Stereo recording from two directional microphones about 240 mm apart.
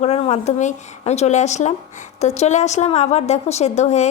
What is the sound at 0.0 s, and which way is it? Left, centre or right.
A woman's voice, left.